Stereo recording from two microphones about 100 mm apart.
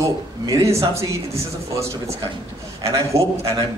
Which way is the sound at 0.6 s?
30° right (ahead or behind).